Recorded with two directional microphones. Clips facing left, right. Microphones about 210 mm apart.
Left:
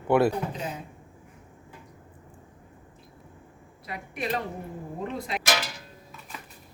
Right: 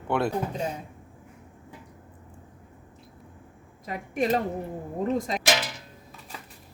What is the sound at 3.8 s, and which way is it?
A woman's voice, 45° right (ahead or behind).